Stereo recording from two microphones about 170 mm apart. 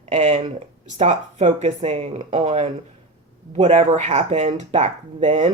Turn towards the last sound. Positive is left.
turn(degrees=-40)  # may be behind; listen again after turning